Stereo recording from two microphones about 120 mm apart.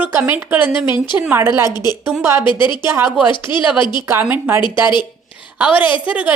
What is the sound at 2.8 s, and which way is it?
Speech, 20° right (ahead or behind).